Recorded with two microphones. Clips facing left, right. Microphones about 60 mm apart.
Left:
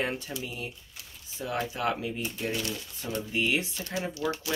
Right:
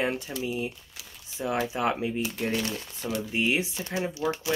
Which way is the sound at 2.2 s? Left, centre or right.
Right.